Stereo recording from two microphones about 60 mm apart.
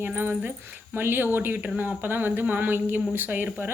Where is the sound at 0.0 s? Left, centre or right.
Right.